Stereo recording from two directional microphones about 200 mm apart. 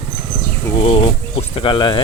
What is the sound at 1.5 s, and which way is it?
Speech, 25° left (ahead or behind).